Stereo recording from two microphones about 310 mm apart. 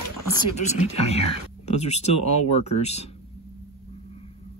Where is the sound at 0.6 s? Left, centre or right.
Left.